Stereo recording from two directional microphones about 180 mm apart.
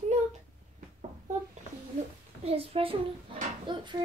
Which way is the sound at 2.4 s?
30° right (ahead or behind).